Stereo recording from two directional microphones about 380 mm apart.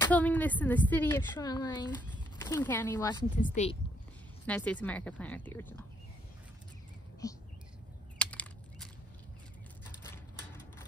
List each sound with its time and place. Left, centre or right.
0.0 s speech: centre
3.3 s speech: centre
4.5 s speech: centre
7.2 s speech: centre
8.2 s a sound: centre
10.0 s typewriter: centre